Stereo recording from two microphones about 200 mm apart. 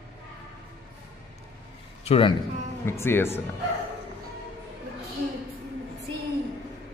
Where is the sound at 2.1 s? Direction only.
25° left (ahead or behind).